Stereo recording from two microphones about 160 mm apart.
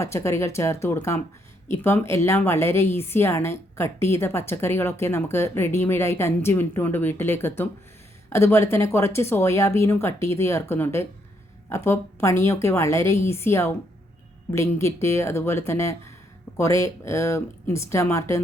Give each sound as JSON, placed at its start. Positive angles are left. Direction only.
{"t": 0.0, "sound": "a woman's voice", "side_deg": 15}